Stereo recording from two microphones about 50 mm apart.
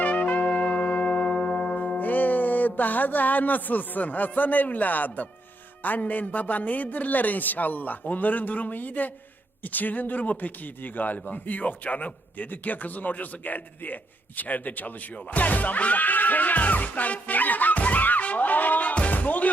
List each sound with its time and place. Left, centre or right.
0.0 s brass instrument: left
5.8 s a man's voice: left